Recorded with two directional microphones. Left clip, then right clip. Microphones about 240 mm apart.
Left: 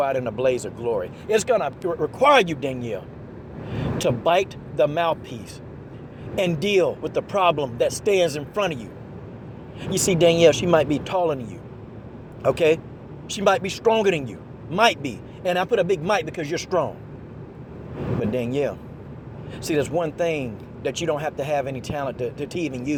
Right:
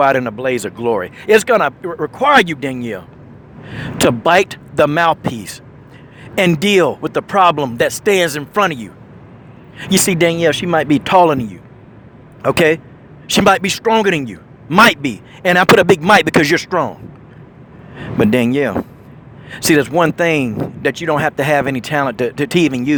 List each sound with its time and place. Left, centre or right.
0.0 s speech: right
6.6 s speech: right
12.4 s speech: right
18.2 s speech: right